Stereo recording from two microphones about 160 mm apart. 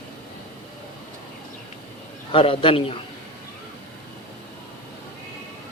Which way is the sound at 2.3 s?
35° left (ahead or behind).